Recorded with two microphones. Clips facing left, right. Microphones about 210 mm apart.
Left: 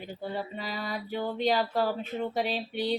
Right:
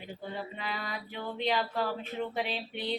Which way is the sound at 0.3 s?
40° left (ahead or behind).